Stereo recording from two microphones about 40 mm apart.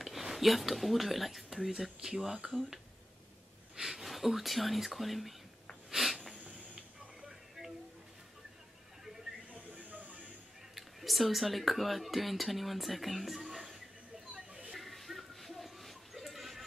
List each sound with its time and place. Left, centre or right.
0.0 s speech: centre
3.8 s speech: centre
5.9 s snort: centre
9.5 s music: right
10.7 s speech: centre
14.3 s a sound: right
14.7 s a sound: centre